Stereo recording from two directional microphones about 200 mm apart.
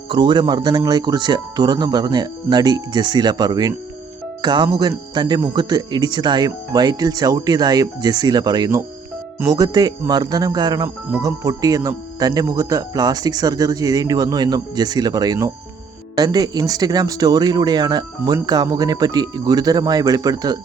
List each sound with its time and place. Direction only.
0.1 s speech: 25° right (ahead or behind)